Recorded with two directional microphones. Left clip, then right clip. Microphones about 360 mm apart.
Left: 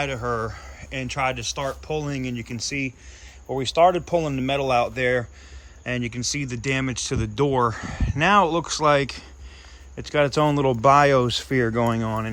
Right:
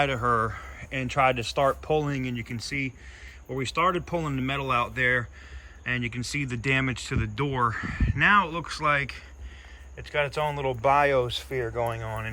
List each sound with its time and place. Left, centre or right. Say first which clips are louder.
0.0 s speech: right 2 dB; centre